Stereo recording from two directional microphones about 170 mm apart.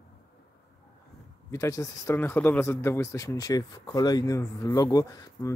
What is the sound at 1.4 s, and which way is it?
Speech, 15° left (ahead or behind).